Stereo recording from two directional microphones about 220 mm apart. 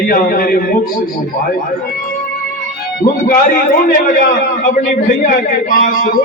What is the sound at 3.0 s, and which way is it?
Speech, 40° left (ahead or behind).